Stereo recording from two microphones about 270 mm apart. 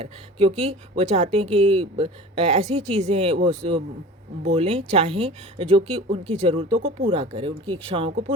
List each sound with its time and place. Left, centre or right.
0.0 s speech: right